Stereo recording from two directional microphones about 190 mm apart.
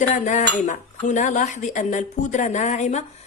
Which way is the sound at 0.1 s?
40° left (ahead or behind).